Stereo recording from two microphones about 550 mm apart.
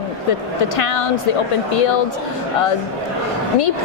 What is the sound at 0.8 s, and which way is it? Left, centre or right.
Speech, left.